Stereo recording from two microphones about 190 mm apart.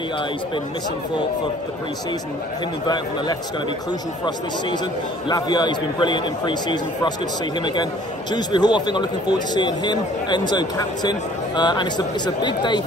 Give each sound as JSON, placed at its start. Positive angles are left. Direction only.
{"t": 5.3, "sound": "speech", "side_deg": 20}
{"t": 8.3, "sound": "speech", "side_deg": 25}